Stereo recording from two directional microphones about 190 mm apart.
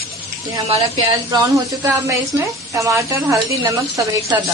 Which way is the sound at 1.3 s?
15° right (ahead or behind).